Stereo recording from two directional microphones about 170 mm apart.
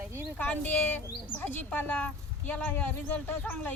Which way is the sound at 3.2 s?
10° left (ahead or behind).